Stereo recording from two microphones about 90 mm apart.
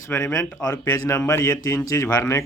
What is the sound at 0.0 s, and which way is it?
Speech, 30° left (ahead or behind).